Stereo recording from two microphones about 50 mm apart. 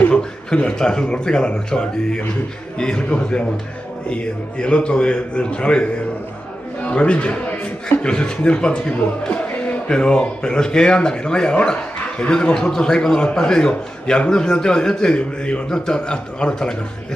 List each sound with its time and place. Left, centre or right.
0.1 s a man's voice: centre